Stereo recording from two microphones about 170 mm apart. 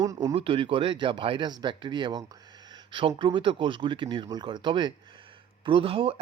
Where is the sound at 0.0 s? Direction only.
20° right (ahead or behind).